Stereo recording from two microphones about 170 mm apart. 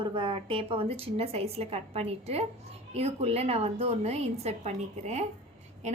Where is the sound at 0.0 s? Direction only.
30° right (ahead or behind).